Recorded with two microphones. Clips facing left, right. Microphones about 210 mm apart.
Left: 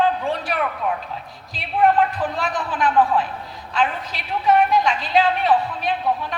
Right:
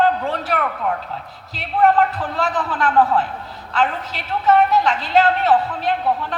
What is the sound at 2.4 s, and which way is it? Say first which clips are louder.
A woman's voice: right 2 dB; 15° left (ahead or behind).